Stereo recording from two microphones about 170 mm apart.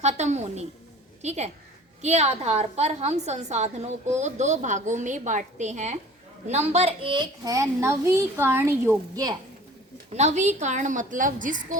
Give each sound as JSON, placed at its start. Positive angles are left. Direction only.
{"t": 0.0, "sound": "a woman's voice", "side_deg": -40}
{"t": 10.1, "sound": "a woman's voice", "side_deg": -40}